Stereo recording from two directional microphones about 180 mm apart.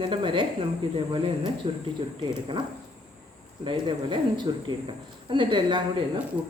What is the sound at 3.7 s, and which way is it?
A woman's voice, 25° right (ahead or behind).